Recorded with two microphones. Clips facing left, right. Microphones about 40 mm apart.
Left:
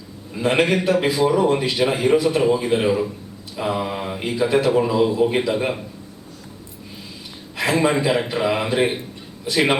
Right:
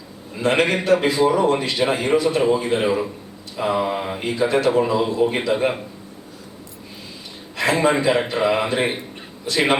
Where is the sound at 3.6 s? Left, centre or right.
Centre.